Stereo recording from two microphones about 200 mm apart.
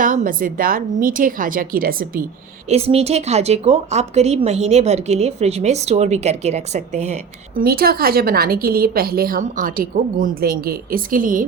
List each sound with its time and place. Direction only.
0.0 s a woman's voice: 40° right (ahead or behind)
2.6 s a woman's voice: 30° right (ahead or behind)
7.6 s a woman's voice: 50° right (ahead or behind)